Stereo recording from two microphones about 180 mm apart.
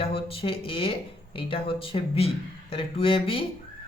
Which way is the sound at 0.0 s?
30° left (ahead or behind).